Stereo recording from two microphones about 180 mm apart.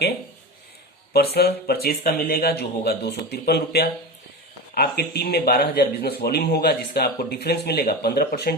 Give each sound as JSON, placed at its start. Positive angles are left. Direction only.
{"t": 1.1, "sound": "speech", "side_deg": 60}